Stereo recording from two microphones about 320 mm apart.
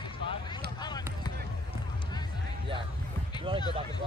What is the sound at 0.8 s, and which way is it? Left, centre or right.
Basketball bounce, centre.